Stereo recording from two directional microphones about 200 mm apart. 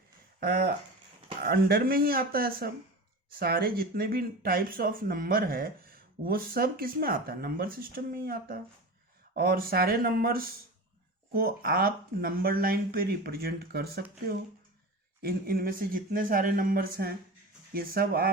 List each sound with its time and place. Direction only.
0.3 s speech: 55° right (ahead or behind)